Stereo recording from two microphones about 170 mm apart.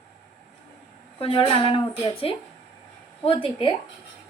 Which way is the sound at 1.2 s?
35° left (ahead or behind).